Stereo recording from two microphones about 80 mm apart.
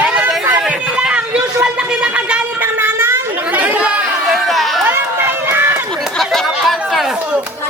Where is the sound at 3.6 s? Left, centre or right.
Centre.